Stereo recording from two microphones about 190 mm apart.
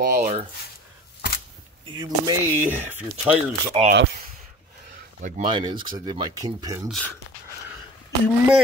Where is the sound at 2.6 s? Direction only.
10° right (ahead or behind).